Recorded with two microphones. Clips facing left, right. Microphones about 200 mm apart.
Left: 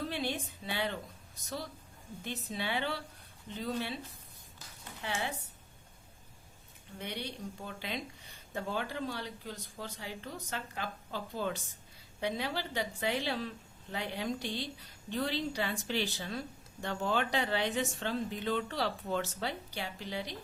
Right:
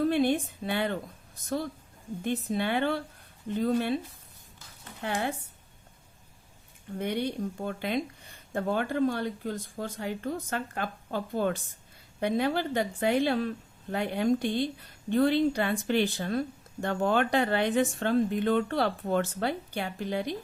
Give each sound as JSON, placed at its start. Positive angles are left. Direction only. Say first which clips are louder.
{"t": 0.0, "sound": "speech", "louder": "right 11 dB", "side_deg": -50}
{"t": 2.2, "sound": "speech", "louder": "right 9 dB", "side_deg": -55}
{"t": 4.9, "sound": "speech", "louder": "right 6 dB", "side_deg": -55}
{"t": 7.0, "sound": "speech", "louder": "right 10 dB", "side_deg": -50}